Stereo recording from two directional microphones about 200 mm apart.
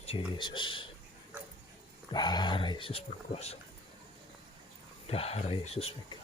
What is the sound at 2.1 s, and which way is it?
Speech, 20° left (ahead or behind).